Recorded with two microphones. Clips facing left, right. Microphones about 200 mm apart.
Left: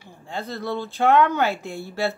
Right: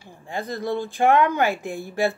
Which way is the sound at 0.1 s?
15° right (ahead or behind).